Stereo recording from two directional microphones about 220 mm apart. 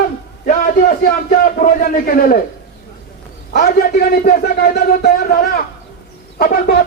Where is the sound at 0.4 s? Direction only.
40° left (ahead or behind).